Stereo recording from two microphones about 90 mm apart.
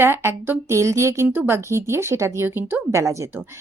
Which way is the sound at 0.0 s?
25° right (ahead or behind).